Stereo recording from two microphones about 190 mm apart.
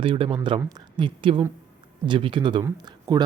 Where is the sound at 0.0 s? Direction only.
30° right (ahead or behind).